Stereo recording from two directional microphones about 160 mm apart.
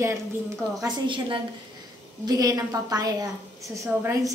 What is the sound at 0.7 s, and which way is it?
Speech, 25° right (ahead or behind).